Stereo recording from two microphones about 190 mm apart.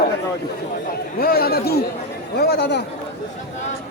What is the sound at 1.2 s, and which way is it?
Speech, 50° left (ahead or behind).